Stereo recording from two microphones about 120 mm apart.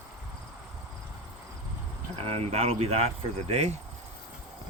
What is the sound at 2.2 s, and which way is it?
Speech, 60° right (ahead or behind).